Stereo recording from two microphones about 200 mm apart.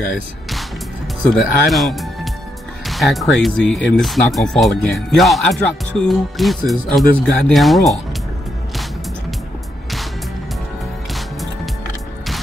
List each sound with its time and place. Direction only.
1.2 s speech: centre (ahead or behind)